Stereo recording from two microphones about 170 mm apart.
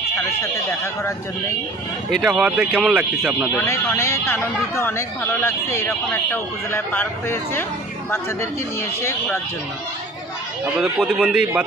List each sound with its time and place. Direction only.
0.4 s speech: 15° left (ahead or behind)
2.0 s speech: centre (ahead or behind)
3.6 s speech: 15° left (ahead or behind)
10.6 s speech: 5° right (ahead or behind)